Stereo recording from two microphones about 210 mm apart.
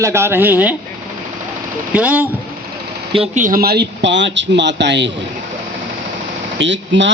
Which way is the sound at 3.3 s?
40° right (ahead or behind).